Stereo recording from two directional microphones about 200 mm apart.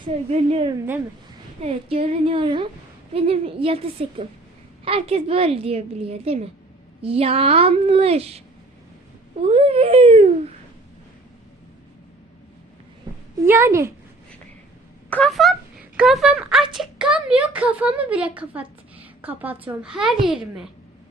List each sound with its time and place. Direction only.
0.0 s a woman's voice: 30° right (ahead or behind)
9.5 s a woman's voice: 30° right (ahead or behind)
13.4 s a woman's voice: 10° right (ahead or behind)
15.1 s speech: centre (ahead or behind)